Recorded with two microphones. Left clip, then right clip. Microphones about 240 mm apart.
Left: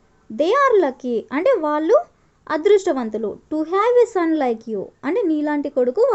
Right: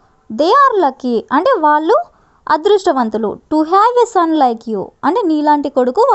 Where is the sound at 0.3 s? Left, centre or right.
Right.